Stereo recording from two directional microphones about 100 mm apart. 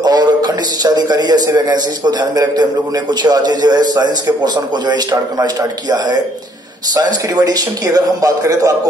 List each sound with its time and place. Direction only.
0.0 s a man's voice: 45° right (ahead or behind)